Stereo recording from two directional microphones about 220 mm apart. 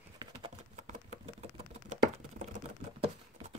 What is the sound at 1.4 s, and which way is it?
Typing, 30° right (ahead or behind).